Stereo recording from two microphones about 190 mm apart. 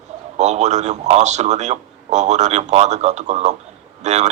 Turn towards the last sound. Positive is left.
turn(degrees=-35)  # may be behind; listen again after turning